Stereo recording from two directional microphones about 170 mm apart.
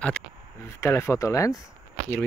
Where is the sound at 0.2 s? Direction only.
5° left (ahead or behind).